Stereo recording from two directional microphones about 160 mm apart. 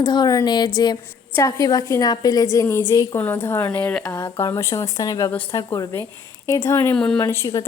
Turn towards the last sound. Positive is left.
turn(degrees=20)  # may be behind; listen again after turning